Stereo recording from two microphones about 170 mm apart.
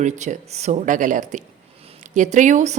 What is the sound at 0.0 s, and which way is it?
Speech, 45° right (ahead or behind).